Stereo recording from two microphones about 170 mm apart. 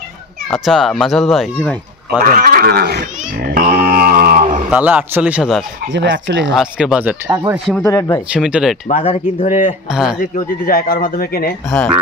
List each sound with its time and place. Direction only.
0.5 s speech: centre (ahead or behind)
2.2 s speech: 55° right (ahead or behind)
3.5 s a sound: 60° right (ahead or behind)
4.6 s speech: 10° right (ahead or behind)
5.9 s speech: 90° right
6.5 s speech: 5° right (ahead or behind)
7.2 s speech: 15° right (ahead or behind)
7.8 s speech: 15° left (ahead or behind)
8.3 s speech: 5° right (ahead or behind)
8.8 s speech: 40° left (ahead or behind)
9.8 s speech: 5° right (ahead or behind)
10.2 s speech: 55° left (ahead or behind)